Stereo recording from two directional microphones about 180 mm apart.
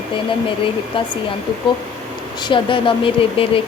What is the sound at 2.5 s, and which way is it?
Speech, 30° left (ahead or behind).